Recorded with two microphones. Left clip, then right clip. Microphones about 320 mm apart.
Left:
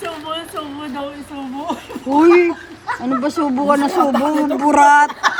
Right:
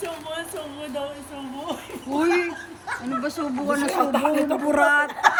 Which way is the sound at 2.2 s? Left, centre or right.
Centre.